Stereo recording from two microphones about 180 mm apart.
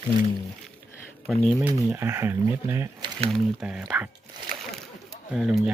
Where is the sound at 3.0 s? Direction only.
35° right (ahead or behind).